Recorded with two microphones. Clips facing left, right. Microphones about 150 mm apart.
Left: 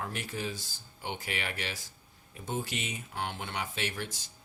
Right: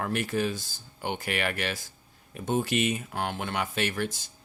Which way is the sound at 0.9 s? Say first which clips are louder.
Right 7 dB; 60° right (ahead or behind).